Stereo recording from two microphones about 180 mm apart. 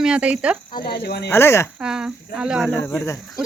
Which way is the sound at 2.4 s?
5° right (ahead or behind).